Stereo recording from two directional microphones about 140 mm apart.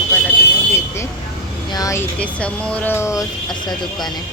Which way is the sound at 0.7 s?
20° left (ahead or behind).